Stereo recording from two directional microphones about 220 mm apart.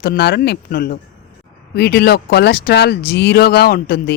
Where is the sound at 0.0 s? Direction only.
50° left (ahead or behind).